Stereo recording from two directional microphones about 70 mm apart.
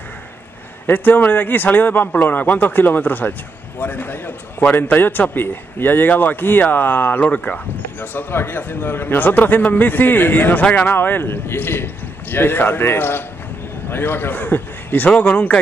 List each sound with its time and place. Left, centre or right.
0.8 s a man's voice: left